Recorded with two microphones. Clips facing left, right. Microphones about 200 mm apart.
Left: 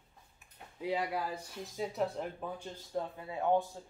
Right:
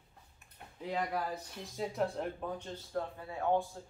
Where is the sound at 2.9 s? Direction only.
20° left (ahead or behind).